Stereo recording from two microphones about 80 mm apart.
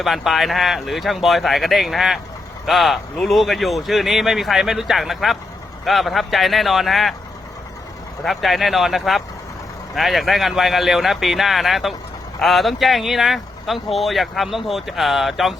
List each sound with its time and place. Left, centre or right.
0.0 s speech: centre
8.2 s speech: centre